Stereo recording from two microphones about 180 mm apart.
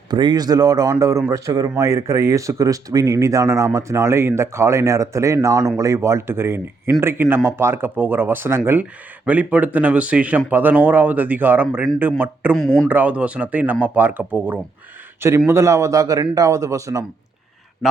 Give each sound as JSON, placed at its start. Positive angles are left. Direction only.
{"t": 0.1, "sound": "speech", "side_deg": -25}
{"t": 12.5, "sound": "speech", "side_deg": 5}
{"t": 12.9, "sound": "speech", "side_deg": -10}